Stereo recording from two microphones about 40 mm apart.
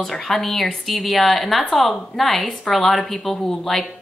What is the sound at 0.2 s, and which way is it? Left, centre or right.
A woman's voice, centre.